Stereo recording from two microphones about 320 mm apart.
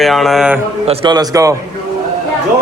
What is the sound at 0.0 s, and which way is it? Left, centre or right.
Speech, centre.